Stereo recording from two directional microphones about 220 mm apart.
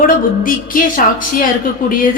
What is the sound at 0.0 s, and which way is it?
A woman's voice, 40° left (ahead or behind).